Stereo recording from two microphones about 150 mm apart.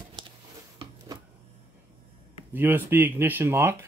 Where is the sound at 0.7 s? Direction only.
25° right (ahead or behind).